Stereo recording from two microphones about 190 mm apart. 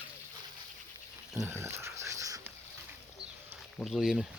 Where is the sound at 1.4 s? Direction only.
15° right (ahead or behind).